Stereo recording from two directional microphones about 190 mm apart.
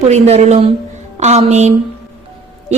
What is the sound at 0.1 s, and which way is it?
A woman's voice, 35° right (ahead or behind).